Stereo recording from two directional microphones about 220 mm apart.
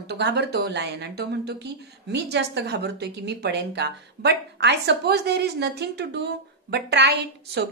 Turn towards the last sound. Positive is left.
turn(degrees=-50)  # may be behind; listen again after turning